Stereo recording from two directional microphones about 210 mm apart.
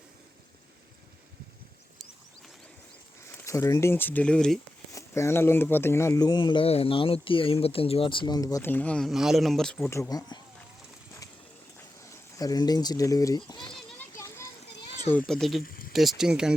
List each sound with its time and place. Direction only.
3.3 s speech: 15° left (ahead or behind)
4.9 s speech: 15° left (ahead or behind)
9.9 s speech: 15° left (ahead or behind)
12.1 s speech: 15° left (ahead or behind)
13.7 s children playing: 5° left (ahead or behind)
15.3 s speech: centre (ahead or behind)
15.6 s a sound: 45° left (ahead or behind)
15.9 s speech: centre (ahead or behind)